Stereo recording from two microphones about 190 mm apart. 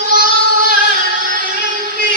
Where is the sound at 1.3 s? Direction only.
45° right (ahead or behind).